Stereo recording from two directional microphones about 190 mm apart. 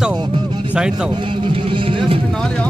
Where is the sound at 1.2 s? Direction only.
25° right (ahead or behind).